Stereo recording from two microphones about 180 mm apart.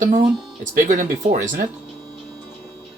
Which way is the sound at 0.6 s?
45° right (ahead or behind).